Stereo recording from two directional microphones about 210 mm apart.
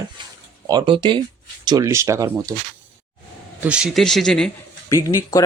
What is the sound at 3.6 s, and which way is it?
Speech, 5° right (ahead or behind).